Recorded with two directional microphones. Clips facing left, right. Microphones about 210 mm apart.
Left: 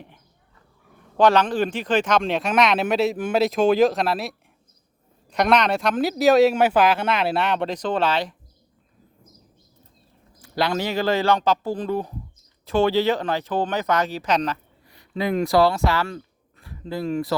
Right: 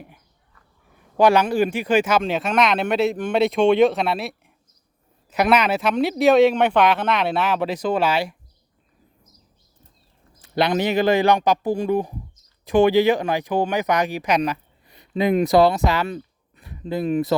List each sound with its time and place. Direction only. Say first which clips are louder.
1.1 s speech: right 1 dB; 10° right (ahead or behind)
10.4 s a man's voice: right 3 dB; 20° right (ahead or behind)